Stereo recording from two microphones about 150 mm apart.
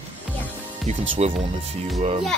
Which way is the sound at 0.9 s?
45° right (ahead or behind).